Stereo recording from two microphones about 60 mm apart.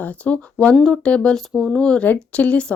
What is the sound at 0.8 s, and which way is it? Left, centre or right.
Speech, centre.